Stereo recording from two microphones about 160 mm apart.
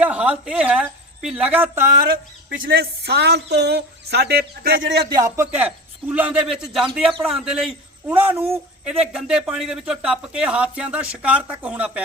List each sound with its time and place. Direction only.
0.0 s a man's voice: 10° right (ahead or behind)
2.6 s speech: 85° right
5.0 s a man's voice: 20° right (ahead or behind)